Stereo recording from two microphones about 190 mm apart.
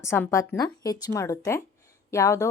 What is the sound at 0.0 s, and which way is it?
Speech, 15° left (ahead or behind).